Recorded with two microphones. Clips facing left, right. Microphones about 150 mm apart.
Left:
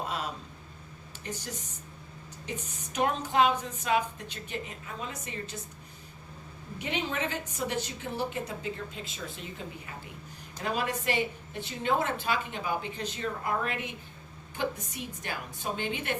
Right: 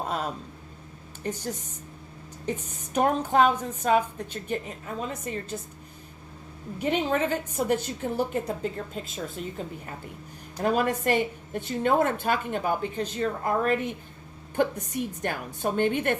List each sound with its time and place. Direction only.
2.5 s a woman's voice: 45° right (ahead or behind)
6.7 s a woman's voice: 45° right (ahead or behind)